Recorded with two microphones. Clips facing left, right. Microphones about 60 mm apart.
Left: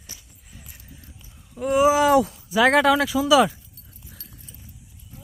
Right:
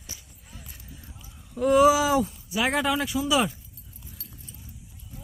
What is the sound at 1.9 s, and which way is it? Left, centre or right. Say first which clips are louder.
Speech: left 6 dB; left.